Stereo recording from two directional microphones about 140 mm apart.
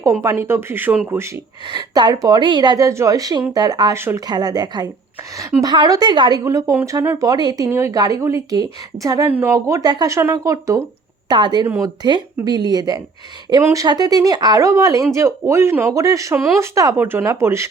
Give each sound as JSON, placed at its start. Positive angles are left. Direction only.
{"t": 0.0, "sound": "speech", "side_deg": -20}
{"t": 1.7, "sound": "speech", "side_deg": -30}
{"t": 4.3, "sound": "speech", "side_deg": -30}
{"t": 11.6, "sound": "speech", "side_deg": -20}
{"t": 13.6, "sound": "speech", "side_deg": -15}
{"t": 13.8, "sound": "speech", "side_deg": -30}